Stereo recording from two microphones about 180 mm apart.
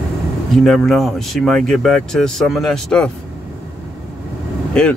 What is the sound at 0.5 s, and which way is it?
Speech, centre (ahead or behind).